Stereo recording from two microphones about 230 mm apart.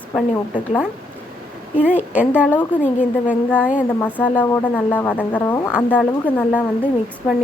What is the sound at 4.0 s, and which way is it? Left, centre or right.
Speech, centre.